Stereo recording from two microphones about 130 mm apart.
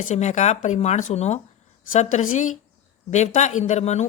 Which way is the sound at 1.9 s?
75° left (ahead or behind).